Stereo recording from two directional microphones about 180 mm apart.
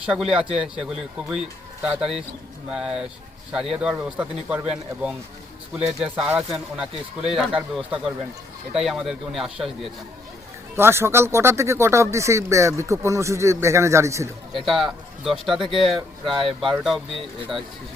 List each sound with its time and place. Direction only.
0.0 s speech: 5° right (ahead or behind)
10.8 s speech: 15° right (ahead or behind)
14.5 s speech: centre (ahead or behind)